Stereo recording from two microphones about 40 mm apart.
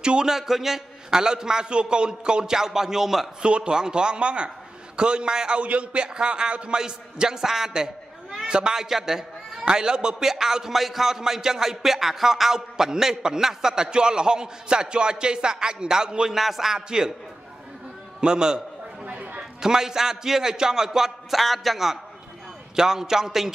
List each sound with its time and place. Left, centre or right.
0.0 s speech: right
0.3 s a man's voice: centre
3.4 s speech: right
5.6 s a man's voice: right
6.0 s a man's voice: centre
8.8 s a man's voice: centre
16.3 s a man's voice: centre
18.2 s speech: right
19.0 s a sound: right
19.6 s a man's voice: centre
21.4 s a man's voice: centre
22.8 s a man's voice: centre